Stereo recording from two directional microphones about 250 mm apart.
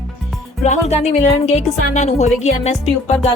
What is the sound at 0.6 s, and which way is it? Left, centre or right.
Speech, left.